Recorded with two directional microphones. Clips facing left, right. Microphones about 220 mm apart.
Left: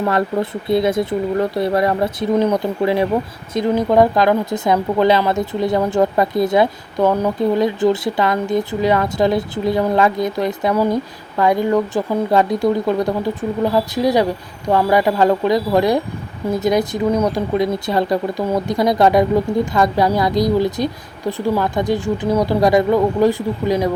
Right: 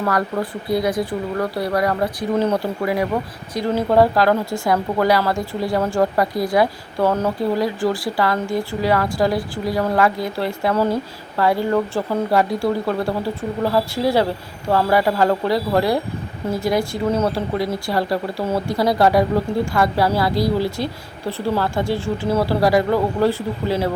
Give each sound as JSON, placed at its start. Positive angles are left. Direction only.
{"t": 0.0, "sound": "a woman's voice", "side_deg": 25}